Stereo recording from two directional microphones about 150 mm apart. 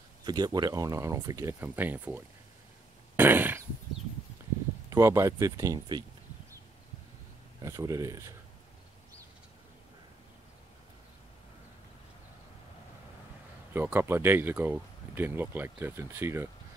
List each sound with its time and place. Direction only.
0.2 s speech: 30° right (ahead or behind); by 2.2 s 10° right (ahead or behind)
3.2 s a sound: 15° right (ahead or behind)
4.8 s speech: 20° right (ahead or behind)
7.6 s speech: 20° right (ahead or behind)
13.7 s speech: 15° right (ahead or behind)